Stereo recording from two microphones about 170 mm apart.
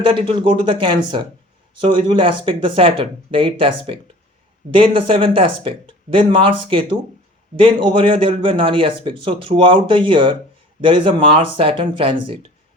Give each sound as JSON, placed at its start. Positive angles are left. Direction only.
{"t": 0.0, "sound": "speech", "side_deg": -30}